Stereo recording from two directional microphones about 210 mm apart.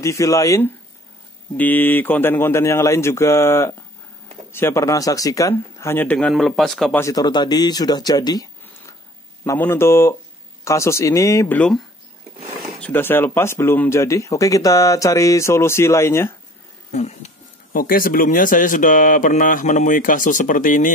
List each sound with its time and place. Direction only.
0.0 s speech: 15° left (ahead or behind)
7.0 s speech: 15° left (ahead or behind)
12.8 s speech: 10° left (ahead or behind)
16.9 s speech: 30° left (ahead or behind)
17.7 s speech: 45° left (ahead or behind)